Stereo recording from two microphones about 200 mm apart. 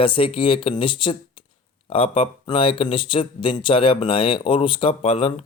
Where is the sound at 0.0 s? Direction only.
25° left (ahead or behind).